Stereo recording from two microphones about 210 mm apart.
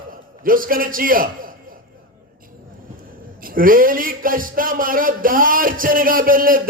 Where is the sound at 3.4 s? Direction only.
40° right (ahead or behind).